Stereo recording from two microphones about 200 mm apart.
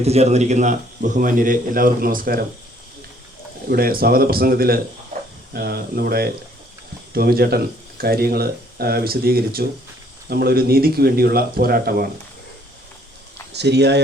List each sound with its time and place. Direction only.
0.0 s a man's voice: 30° right (ahead or behind)
3.7 s speech: 50° right (ahead or behind)
13.5 s speech: 55° right (ahead or behind)